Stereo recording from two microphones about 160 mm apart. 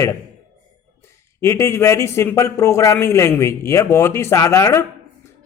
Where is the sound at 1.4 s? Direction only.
15° left (ahead or behind).